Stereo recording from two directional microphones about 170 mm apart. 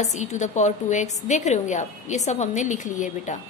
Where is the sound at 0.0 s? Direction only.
45° left (ahead or behind).